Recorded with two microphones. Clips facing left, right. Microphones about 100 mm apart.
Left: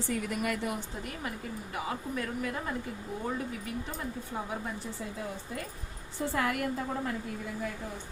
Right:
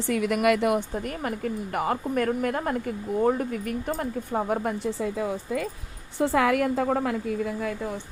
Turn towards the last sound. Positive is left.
turn(degrees=-90)